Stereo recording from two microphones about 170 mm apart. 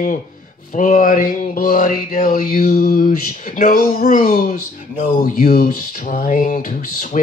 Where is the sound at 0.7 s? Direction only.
50° left (ahead or behind).